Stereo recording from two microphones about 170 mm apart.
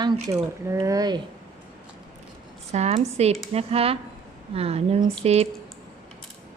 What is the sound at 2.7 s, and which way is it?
A woman's voice, 40° right (ahead or behind).